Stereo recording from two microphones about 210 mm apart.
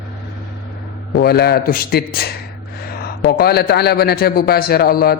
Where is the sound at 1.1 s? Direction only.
50° left (ahead or behind).